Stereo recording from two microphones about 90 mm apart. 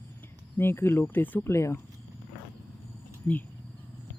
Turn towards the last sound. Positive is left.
turn(degrees=30)  # may be behind; listen again after turning